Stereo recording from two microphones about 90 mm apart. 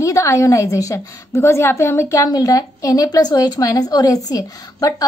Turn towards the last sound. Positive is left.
turn(degrees=40)  # may be behind; listen again after turning